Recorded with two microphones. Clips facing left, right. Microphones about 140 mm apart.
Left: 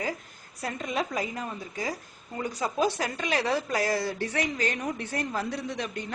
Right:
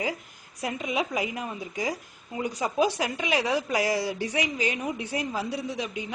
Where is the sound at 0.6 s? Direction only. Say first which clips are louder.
Right 2 dB; 10° right (ahead or behind).